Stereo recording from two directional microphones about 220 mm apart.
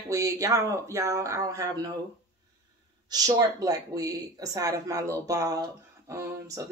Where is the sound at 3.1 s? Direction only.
15° right (ahead or behind).